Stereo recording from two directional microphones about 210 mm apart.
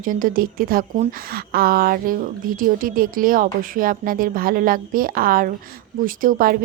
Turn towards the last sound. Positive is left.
turn(degrees=-40)  # may be behind; listen again after turning